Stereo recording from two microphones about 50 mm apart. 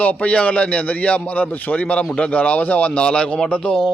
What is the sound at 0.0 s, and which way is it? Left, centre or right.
A man's voice, left.